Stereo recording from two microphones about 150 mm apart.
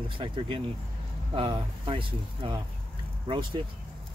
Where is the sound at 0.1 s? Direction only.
35° right (ahead or behind).